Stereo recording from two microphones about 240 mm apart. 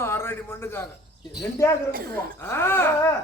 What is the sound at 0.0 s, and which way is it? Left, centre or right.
Speech, centre.